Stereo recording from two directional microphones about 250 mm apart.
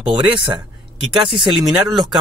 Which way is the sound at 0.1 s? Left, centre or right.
Centre.